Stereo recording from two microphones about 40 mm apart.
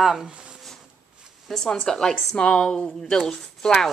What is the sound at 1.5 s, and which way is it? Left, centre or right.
Speech, centre.